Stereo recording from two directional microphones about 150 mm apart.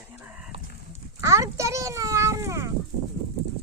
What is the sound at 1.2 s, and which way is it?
A child's voice, 20° right (ahead or behind).